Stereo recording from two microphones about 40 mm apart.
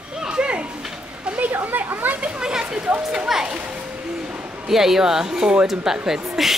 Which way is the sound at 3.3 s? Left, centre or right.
Centre.